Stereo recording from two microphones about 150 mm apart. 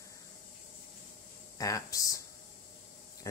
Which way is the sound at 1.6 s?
20° left (ahead or behind).